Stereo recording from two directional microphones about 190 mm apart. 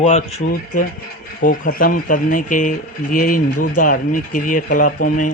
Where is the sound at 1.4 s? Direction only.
45° left (ahead or behind).